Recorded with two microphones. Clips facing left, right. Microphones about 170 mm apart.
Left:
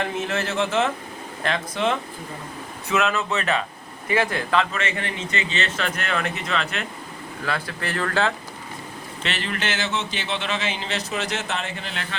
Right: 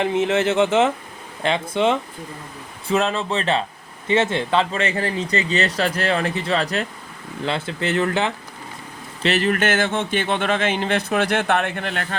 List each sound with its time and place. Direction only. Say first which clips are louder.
0.0 s speech: right 7 dB; 25° right (ahead or behind)
7.4 s speech: right 5 dB; 25° right (ahead or behind)
9.2 s speech: right 9 dB; 40° right (ahead or behind); by 12.0 s 55° right (ahead or behind)